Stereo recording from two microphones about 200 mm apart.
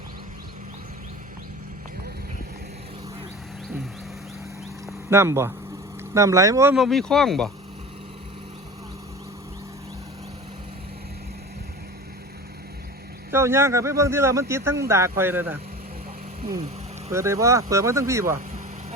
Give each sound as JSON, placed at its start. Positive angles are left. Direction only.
{"t": 4.9, "sound": "speech", "side_deg": -15}
{"t": 6.7, "sound": "speech", "side_deg": 0}
{"t": 13.3, "sound": "speech", "side_deg": -15}
{"t": 17.1, "sound": "speech", "side_deg": -15}